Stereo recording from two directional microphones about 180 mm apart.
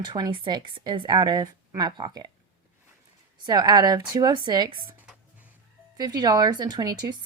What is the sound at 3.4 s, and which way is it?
Speech, 25° right (ahead or behind).